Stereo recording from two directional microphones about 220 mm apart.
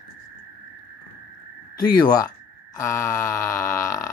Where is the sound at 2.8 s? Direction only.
15° left (ahead or behind).